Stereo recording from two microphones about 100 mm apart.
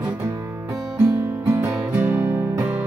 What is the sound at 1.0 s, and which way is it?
Music, 25° right (ahead or behind).